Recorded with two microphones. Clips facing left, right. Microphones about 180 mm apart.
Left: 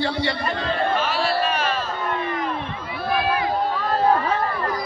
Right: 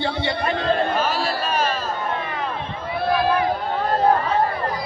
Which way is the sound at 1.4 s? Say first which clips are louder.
Right 1 dB; 40° right (ahead or behind).